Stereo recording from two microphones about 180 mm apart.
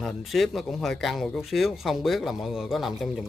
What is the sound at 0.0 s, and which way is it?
A man's voice, centre (ahead or behind).